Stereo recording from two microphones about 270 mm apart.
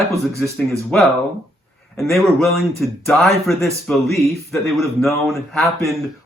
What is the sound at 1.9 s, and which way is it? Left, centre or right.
A man's voice, centre.